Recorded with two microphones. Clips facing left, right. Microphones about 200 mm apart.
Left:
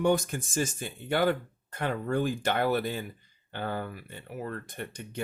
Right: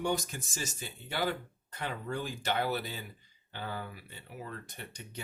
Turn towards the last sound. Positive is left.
turn(degrees=50)  # may be behind; listen again after turning